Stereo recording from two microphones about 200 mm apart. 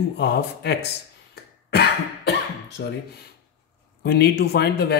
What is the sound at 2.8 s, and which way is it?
Speech, 60° left (ahead or behind).